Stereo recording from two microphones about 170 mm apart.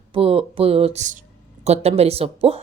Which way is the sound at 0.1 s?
35° right (ahead or behind).